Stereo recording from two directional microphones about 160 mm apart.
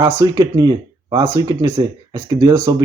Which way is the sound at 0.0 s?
20° right (ahead or behind).